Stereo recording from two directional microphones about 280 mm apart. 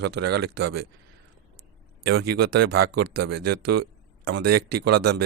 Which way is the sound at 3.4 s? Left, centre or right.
Right.